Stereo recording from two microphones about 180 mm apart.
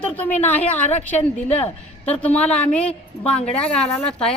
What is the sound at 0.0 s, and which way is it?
Speech, 10° left (ahead or behind).